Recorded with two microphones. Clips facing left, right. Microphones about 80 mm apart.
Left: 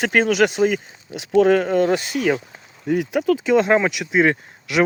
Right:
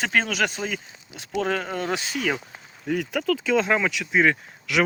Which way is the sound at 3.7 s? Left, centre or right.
Left.